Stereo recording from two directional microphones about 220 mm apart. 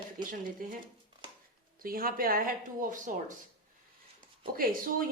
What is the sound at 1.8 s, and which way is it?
Speech, 40° right (ahead or behind).